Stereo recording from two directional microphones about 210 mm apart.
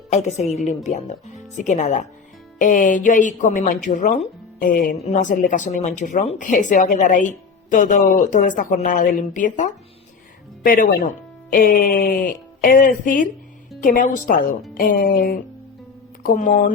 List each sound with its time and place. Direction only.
0.1 s speech: 35° left (ahead or behind)